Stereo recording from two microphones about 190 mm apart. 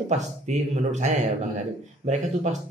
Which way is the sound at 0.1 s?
35° right (ahead or behind).